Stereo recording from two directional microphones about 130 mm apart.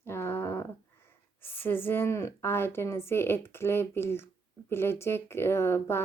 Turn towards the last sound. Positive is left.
turn(degrees=20)  # may be behind; listen again after turning